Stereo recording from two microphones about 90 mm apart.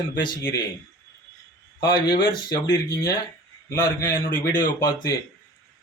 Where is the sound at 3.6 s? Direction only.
40° left (ahead or behind).